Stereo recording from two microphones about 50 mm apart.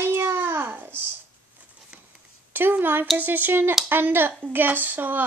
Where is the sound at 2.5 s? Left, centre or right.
Right.